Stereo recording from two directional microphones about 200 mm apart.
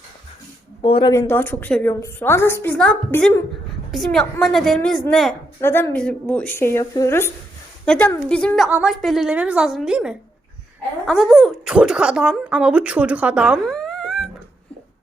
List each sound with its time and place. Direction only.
0.8 s speech: 25° left (ahead or behind)
1.1 s a woman's voice: 15° left (ahead or behind)
5.5 s a woman's voice: 15° left (ahead or behind)